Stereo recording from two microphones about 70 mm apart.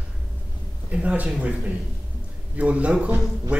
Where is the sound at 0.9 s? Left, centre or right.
Centre.